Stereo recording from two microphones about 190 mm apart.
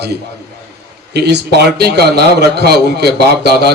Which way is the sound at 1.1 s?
60° right (ahead or behind).